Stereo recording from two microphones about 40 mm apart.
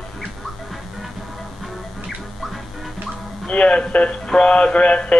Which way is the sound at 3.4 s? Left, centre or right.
Left.